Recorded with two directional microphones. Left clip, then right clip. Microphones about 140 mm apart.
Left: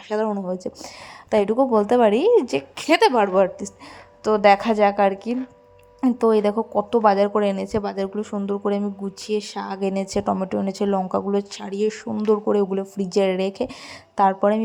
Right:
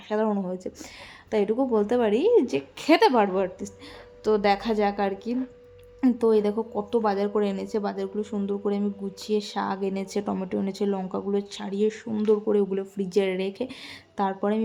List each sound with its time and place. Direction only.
0.3 s a woman's voice: 25° left (ahead or behind)